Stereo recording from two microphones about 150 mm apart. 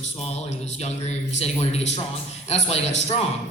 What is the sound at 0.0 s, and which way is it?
Speech, 45° left (ahead or behind).